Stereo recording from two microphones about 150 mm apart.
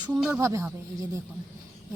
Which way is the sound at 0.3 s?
20° right (ahead or behind).